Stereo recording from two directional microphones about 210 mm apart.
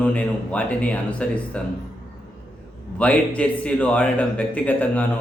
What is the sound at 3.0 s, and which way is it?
A man's voice, 5° left (ahead or behind).